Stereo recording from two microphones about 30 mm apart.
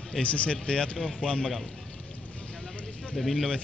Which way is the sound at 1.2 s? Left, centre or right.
Left.